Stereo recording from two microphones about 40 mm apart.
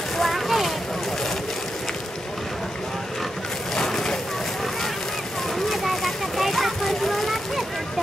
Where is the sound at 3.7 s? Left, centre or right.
Centre.